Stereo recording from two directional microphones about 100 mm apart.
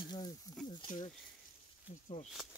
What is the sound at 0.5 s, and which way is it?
Snake, 35° left (ahead or behind).